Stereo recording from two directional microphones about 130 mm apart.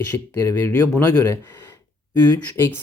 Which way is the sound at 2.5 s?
20° left (ahead or behind).